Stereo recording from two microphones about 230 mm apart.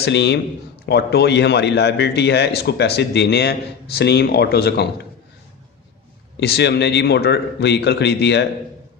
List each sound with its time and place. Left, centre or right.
0.0 s speech: left
6.4 s speech: left